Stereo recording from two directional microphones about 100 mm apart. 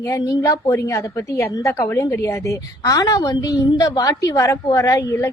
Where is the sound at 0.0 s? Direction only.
30° left (ahead or behind).